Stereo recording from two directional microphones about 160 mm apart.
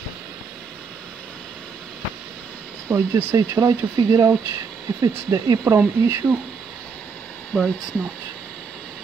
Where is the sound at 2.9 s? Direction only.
15° right (ahead or behind).